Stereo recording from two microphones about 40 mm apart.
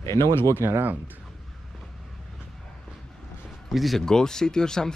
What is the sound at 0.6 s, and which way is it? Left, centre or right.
Speech, right.